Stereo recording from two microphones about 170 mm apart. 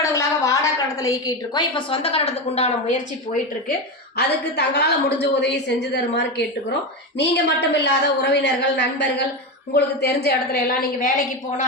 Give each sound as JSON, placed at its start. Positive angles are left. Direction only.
{"t": 0.0, "sound": "a woman's voice", "side_deg": 20}
{"t": 4.2, "sound": "a woman's voice", "side_deg": 75}
{"t": 5.2, "sound": "a woman's voice", "side_deg": 90}
{"t": 9.7, "sound": "a woman's voice", "side_deg": 70}